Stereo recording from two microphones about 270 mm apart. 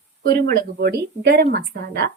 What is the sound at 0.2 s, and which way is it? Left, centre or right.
Speech, right.